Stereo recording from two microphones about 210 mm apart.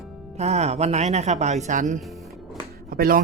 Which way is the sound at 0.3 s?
30° right (ahead or behind).